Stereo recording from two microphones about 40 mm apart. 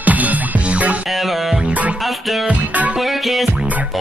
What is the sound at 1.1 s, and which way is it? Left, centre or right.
Music, centre.